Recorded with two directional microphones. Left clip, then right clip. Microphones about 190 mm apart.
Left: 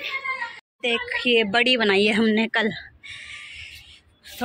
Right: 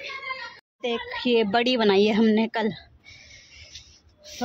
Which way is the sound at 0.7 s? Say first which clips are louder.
Left 5 dB; 10° right (ahead or behind).